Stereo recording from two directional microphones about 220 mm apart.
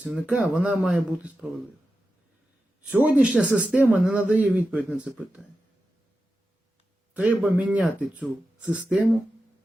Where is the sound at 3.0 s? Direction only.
5° right (ahead or behind).